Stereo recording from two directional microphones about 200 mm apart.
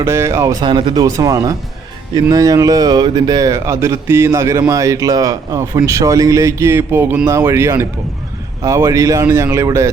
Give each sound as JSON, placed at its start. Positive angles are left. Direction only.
{"t": 0.0, "sound": "speech", "side_deg": -15}